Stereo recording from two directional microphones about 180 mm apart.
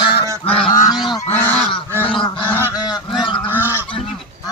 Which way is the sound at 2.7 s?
20° left (ahead or behind).